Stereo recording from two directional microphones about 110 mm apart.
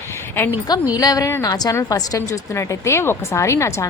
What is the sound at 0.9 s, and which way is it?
A woman's voice, 35° left (ahead or behind).